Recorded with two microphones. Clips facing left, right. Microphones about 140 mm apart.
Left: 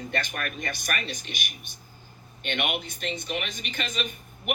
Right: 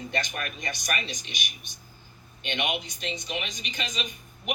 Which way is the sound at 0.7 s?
50° left (ahead or behind).